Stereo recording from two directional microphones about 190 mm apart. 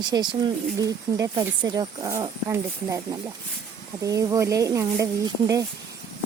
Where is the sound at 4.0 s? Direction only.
15° right (ahead or behind).